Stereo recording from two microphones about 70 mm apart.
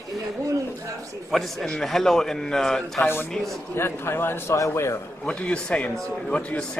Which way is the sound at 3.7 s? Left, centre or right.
Left.